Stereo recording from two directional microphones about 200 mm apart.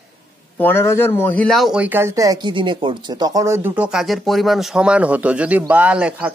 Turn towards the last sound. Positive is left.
turn(degrees=-5)  # may be behind; listen again after turning